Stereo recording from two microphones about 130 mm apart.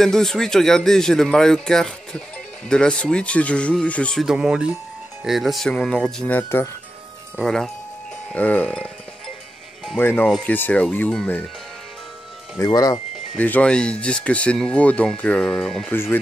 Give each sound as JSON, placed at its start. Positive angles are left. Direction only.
{"t": 0.0, "sound": "speech", "side_deg": 5}
{"t": 9.9, "sound": "speech", "side_deg": 15}
{"t": 12.6, "sound": "speech", "side_deg": 30}
{"t": 13.4, "sound": "speech", "side_deg": 10}
{"t": 15.9, "sound": "speech", "side_deg": 15}